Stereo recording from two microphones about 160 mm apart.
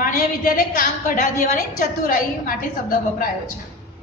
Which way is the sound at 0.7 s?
60° left (ahead or behind).